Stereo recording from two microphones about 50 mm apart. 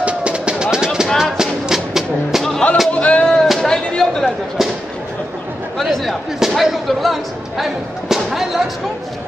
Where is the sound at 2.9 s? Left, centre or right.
Left.